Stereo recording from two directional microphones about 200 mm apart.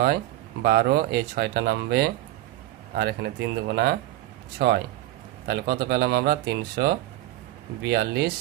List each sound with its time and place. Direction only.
0.6 s speech: 55° right (ahead or behind)